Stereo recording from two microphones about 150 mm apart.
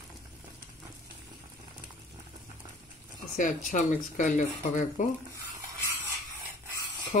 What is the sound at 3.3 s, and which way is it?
Speech, 60° left (ahead or behind).